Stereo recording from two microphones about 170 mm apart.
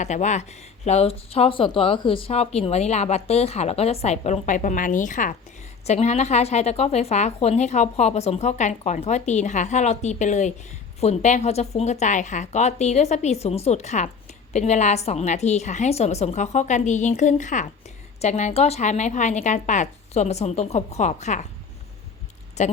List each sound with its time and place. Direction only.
0.0 s a woman's voice: 45° left (ahead or behind)
22.6 s a woman's voice: 45° left (ahead or behind)